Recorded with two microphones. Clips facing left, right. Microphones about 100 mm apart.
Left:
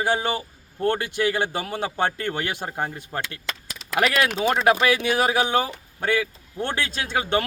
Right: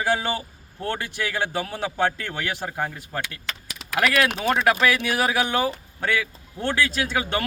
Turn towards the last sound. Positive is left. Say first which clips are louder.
# left 1 dB
turn(degrees=20)  # may be behind; listen again after turning